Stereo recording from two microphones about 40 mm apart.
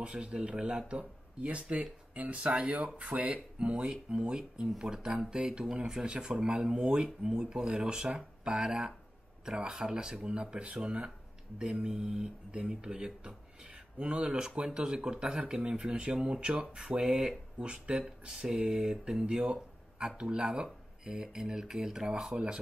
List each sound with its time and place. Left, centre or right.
0.0 s speech: right
1.4 s speech: right
3.0 s speech: right
3.5 s speech: right